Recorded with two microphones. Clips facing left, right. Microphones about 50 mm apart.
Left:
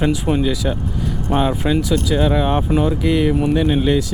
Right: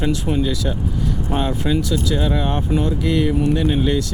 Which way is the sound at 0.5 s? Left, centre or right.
Centre.